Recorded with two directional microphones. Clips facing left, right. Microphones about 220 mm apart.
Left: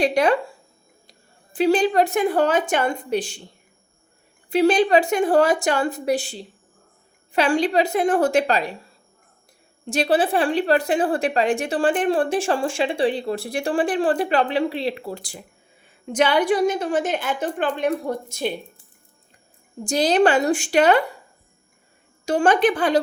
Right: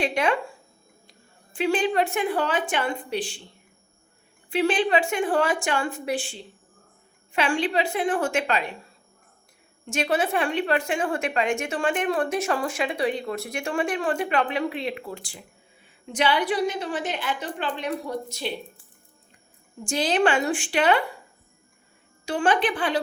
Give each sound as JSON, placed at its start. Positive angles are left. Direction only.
{"t": 0.0, "sound": "a woman's voice", "side_deg": 40}
{"t": 1.5, "sound": "a woman's voice", "side_deg": 35}
{"t": 4.4, "sound": "a woman's voice", "side_deg": 40}
{"t": 9.8, "sound": "a woman's voice", "side_deg": 35}
{"t": 19.8, "sound": "a woman's voice", "side_deg": 40}
{"t": 22.3, "sound": "a woman's voice", "side_deg": 45}